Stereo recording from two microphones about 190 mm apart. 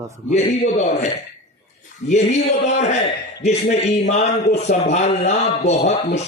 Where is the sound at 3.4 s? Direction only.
35° left (ahead or behind).